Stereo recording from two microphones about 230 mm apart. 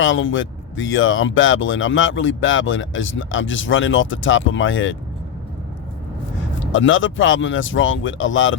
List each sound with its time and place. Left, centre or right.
0.0 s speech: left
6.6 s speech: left